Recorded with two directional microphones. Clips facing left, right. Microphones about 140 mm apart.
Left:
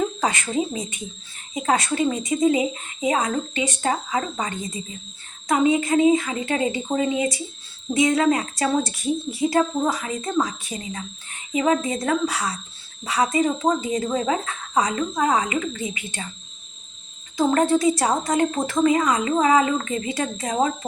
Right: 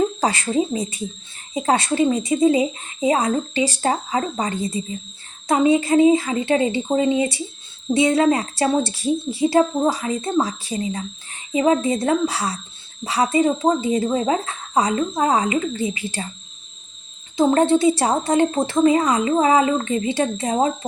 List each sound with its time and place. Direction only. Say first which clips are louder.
0.0 s a woman's voice: right 3 dB; 35° right (ahead or behind)
17.3 s a woman's voice: right 3 dB; 25° right (ahead or behind)